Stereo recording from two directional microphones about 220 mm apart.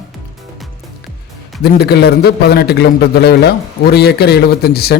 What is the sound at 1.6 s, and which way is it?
A man's voice, 45° left (ahead or behind).